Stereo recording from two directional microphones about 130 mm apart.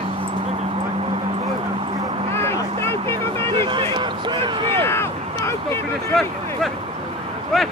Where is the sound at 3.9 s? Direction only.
35° right (ahead or behind).